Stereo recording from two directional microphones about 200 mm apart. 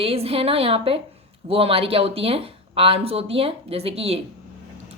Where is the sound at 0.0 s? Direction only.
30° right (ahead or behind).